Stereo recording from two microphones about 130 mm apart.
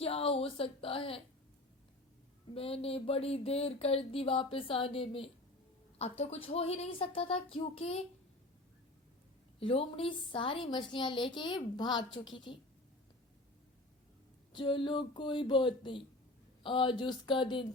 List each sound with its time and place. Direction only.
0.0 s speech: 50° left (ahead or behind)
2.6 s speech: 50° left (ahead or behind)
9.6 s a woman's voice: 45° left (ahead or behind)
14.5 s a woman's voice: 40° left (ahead or behind)